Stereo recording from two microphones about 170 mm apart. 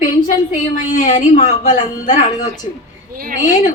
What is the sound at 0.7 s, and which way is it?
A woman's voice, 50° left (ahead or behind).